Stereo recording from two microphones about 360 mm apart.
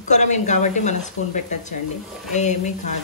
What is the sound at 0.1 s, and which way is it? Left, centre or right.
Speech, centre.